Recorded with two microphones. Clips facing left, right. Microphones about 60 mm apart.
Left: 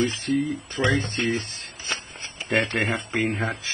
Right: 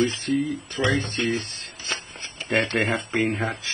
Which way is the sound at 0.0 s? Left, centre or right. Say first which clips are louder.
Right 1 dB; centre.